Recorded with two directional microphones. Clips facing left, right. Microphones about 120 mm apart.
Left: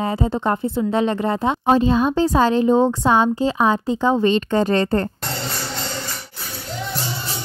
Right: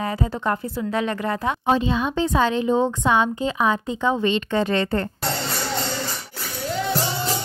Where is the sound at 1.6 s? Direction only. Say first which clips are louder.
Left 5 dB; 40° left (ahead or behind).